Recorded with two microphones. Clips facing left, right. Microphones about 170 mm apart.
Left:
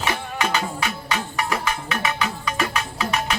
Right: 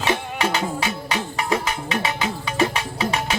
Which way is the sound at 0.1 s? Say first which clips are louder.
Right 3 dB; 25° right (ahead or behind).